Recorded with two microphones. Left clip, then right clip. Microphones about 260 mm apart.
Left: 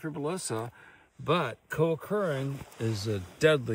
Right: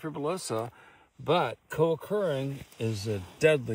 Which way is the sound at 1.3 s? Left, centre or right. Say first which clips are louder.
Right 4 dB; right.